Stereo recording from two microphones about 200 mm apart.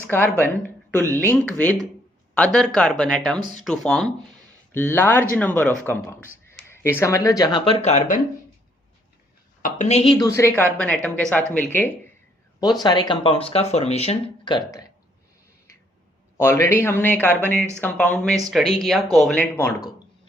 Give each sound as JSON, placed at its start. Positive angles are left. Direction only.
{"t": 0.1, "sound": "a woman's voice", "side_deg": 10}
{"t": 9.6, "sound": "a woman's voice", "side_deg": 35}
{"t": 12.8, "sound": "speech", "side_deg": 20}
{"t": 16.4, "sound": "a woman's voice", "side_deg": 10}